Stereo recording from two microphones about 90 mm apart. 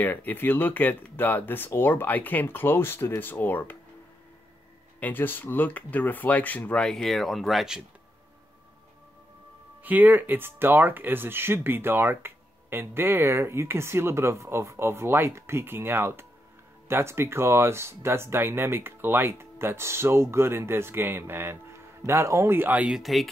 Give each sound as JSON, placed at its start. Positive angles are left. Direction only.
{"t": 0.0, "sound": "speech", "side_deg": 20}
{"t": 5.0, "sound": "speech", "side_deg": 20}
{"t": 9.8, "sound": "speech", "side_deg": -20}
{"t": 23.0, "sound": "speech", "side_deg": 0}